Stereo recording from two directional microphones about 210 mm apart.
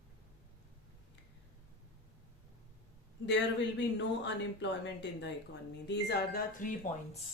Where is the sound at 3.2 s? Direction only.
55° left (ahead or behind).